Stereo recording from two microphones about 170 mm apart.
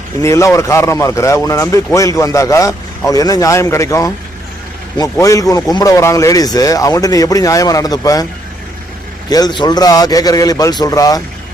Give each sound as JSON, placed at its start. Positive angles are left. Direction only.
{"t": 0.2, "sound": "a man's voice", "side_deg": 15}
{"t": 5.2, "sound": "a man's voice", "side_deg": 20}
{"t": 9.3, "sound": "a man's voice", "side_deg": 25}